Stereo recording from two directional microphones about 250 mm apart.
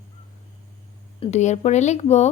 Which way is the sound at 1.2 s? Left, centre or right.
Left.